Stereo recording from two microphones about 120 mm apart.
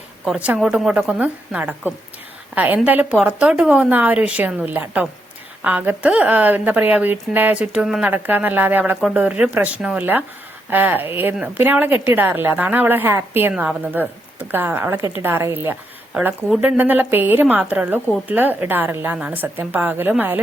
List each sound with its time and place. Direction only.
0.3 s a woman's voice: 10° right (ahead or behind)